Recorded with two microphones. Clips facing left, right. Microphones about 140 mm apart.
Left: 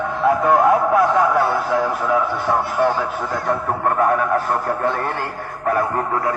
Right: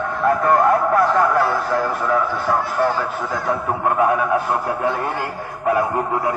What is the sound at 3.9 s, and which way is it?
Speech, 5° right (ahead or behind).